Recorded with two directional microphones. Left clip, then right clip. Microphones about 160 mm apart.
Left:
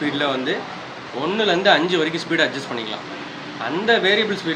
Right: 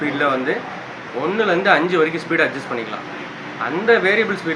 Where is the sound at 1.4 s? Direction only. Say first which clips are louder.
Right 1 dB; 40° left (ahead or behind).